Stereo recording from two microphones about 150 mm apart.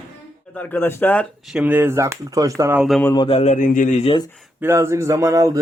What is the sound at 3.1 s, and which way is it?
Speech, 30° left (ahead or behind).